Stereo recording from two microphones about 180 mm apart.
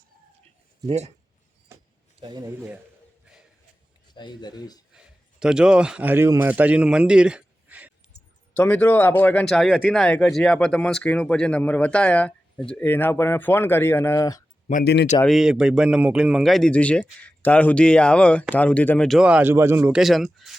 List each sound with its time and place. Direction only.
0.9 s speech: 35° right (ahead or behind)
1.7 s vehicle: 15° right (ahead or behind)
2.2 s speech: 20° right (ahead or behind)
4.1 s speech: 25° left (ahead or behind)
4.9 s a man's voice: 5° right (ahead or behind)
8.5 s speech: 10° left (ahead or behind)
14.7 s speech: 50° left (ahead or behind)
15.3 s a man's voice: 5° right (ahead or behind)
20.0 s a man's voice: centre (ahead or behind)